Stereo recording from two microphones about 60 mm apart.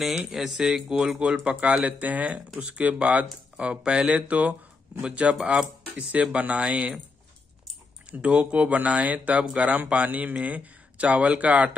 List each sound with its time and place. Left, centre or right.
0.3 s speech: centre; by 7.0 s right
8.1 s speech: centre